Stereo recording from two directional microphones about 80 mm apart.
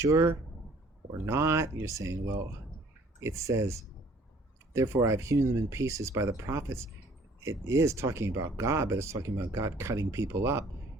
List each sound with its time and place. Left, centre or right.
0.0 s speech: right